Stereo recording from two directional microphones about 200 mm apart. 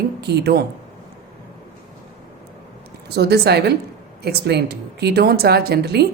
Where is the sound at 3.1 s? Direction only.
55° right (ahead or behind).